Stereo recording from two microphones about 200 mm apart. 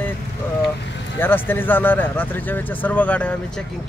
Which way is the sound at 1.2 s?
10° left (ahead or behind).